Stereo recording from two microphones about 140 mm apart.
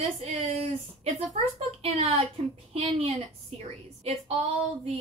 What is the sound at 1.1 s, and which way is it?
A woman's voice, 50° right (ahead or behind).